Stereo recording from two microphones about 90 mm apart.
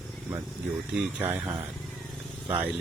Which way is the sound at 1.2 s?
20° right (ahead or behind).